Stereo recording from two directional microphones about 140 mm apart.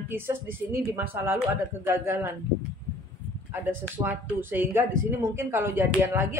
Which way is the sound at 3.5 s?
15° right (ahead or behind).